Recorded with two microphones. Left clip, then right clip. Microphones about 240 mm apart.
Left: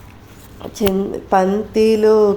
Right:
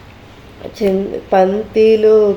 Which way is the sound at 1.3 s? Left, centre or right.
Left.